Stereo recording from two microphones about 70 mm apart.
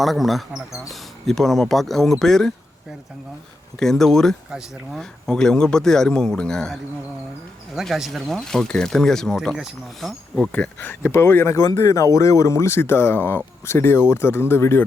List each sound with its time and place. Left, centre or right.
0.0 s speech: centre
3.8 s speech: centre
7.8 s speech: centre
8.3 s speech: centre
10.5 s speech: left
11.7 s speech: left